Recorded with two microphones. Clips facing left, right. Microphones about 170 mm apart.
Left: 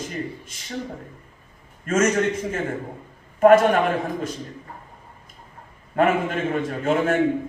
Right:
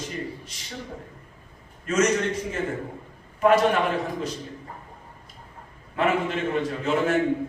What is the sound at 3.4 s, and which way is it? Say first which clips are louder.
Speech: left 5 dB; 50° left (ahead or behind).